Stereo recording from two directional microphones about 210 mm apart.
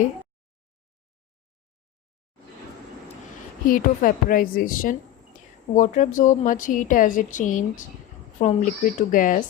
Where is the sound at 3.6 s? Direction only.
40° left (ahead or behind).